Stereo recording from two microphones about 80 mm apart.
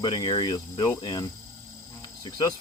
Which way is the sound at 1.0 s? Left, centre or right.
Left.